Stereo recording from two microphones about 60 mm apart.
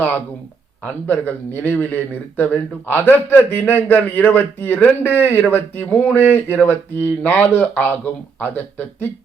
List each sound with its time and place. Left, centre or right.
1.0 s speech: left